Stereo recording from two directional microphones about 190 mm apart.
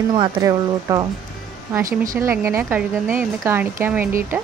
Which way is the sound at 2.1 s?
15° right (ahead or behind).